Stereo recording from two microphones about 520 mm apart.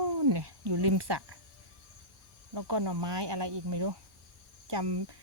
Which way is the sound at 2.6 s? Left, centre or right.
Right.